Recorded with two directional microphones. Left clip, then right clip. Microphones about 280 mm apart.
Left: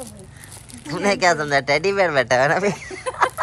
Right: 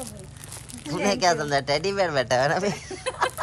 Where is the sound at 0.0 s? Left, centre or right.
Centre.